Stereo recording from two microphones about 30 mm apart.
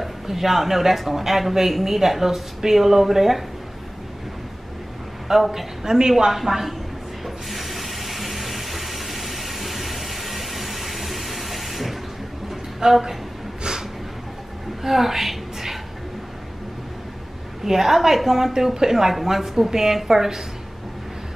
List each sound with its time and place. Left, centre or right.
0.0 s a woman's voice: centre
5.3 s speech: centre
5.9 s a woman's voice: right
6.3 s speech: centre
7.2 s ratchet: centre
12.8 s a woman's voice: right
13.7 s a sound: right
14.8 s a sound: centre
17.6 s speech: centre